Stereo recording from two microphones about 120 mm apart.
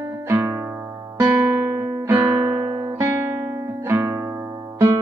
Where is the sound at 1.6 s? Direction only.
20° right (ahead or behind).